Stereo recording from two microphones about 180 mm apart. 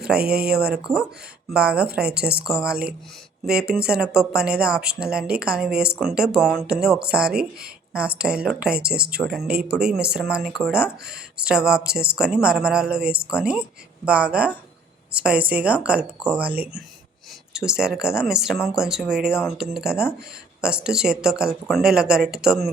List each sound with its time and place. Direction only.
0.2 s speech: 60° right (ahead or behind)
0.5 s speech: 5° right (ahead or behind)
7.3 s speech: 60° right (ahead or behind)
7.9 s speech: 5° right (ahead or behind)